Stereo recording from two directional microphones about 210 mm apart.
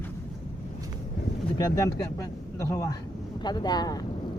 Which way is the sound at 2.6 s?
15° left (ahead or behind).